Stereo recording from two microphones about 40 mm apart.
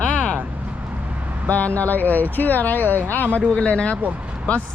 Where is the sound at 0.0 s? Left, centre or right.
Left.